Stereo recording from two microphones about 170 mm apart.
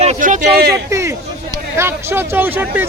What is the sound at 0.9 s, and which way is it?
Speech, 15° right (ahead or behind).